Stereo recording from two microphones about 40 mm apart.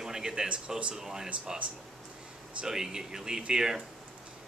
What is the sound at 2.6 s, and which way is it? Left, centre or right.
Speech, centre.